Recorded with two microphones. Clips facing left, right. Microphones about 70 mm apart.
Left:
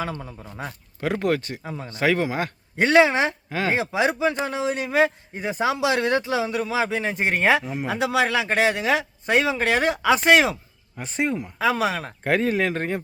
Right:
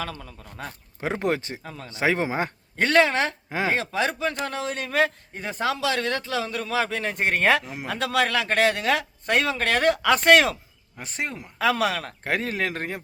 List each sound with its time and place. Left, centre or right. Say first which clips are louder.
0.1 s a man's voice: left 5 dB; left
1.0 s speech: left 2 dB; right
1.6 s a man's voice: left 5 dB; centre
1.9 s speech: left 2 dB; centre
2.7 s a man's voice: left 3 dB; centre